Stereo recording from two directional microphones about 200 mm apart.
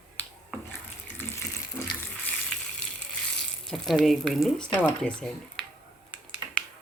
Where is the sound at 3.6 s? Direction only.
Centre (ahead or behind).